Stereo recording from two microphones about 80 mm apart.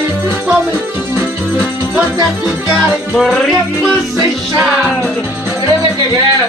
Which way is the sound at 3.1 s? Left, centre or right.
Centre.